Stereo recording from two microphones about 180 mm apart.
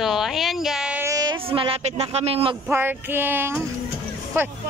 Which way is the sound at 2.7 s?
10° right (ahead or behind).